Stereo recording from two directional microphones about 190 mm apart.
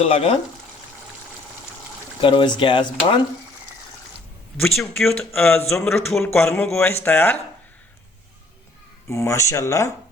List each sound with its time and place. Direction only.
0.0 s speech: 30° left (ahead or behind)
2.2 s speech: 25° left (ahead or behind)
4.5 s speech: centre (ahead or behind)
5.3 s speech: 10° left (ahead or behind)
6.4 s speech: 15° left (ahead or behind)
9.0 s speech: 15° left (ahead or behind)